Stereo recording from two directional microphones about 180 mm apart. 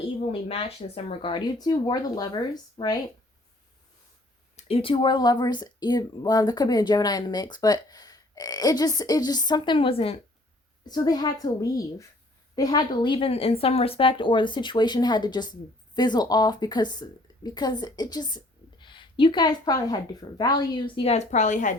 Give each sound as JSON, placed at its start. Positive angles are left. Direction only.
{"t": 0.3, "sound": "speech", "side_deg": 30}
{"t": 4.5, "sound": "speech", "side_deg": 30}
{"t": 10.8, "sound": "a woman's voice", "side_deg": 20}